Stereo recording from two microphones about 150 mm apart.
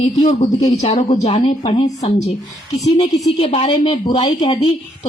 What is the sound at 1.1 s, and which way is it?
Speech, 50° left (ahead or behind).